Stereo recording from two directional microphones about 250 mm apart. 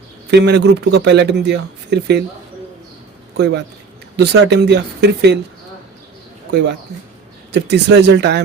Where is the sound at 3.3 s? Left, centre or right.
Right.